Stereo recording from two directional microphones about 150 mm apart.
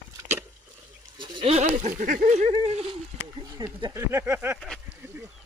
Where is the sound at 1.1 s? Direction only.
30° right (ahead or behind).